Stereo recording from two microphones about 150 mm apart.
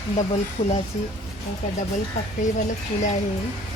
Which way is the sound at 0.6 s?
45° left (ahead or behind).